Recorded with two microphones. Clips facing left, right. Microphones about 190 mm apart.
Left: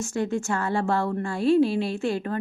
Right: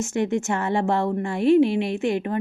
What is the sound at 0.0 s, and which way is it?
Speech, 20° right (ahead or behind).